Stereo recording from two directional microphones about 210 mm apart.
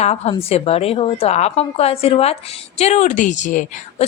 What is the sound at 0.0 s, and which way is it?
A woman's voice, 30° left (ahead or behind).